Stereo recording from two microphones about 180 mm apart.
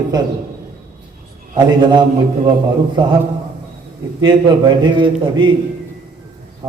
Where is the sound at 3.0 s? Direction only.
25° right (ahead or behind).